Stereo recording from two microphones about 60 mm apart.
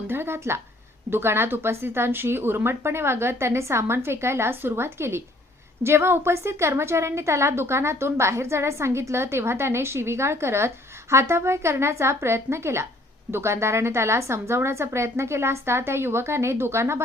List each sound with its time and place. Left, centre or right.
0.1 s a woman's voice: right